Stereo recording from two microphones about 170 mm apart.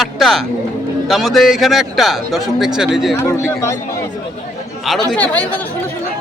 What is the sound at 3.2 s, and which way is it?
Speech, 15° left (ahead or behind).